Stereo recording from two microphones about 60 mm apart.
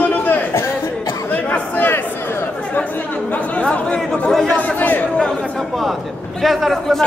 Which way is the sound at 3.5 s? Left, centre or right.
Centre.